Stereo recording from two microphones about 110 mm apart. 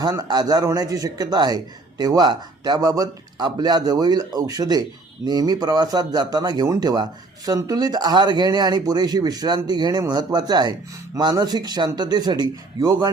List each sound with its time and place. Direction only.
0.0 s a man's voice: 35° right (ahead or behind)